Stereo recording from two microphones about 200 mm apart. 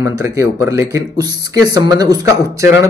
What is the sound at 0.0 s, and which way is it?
A man's voice, 15° right (ahead or behind).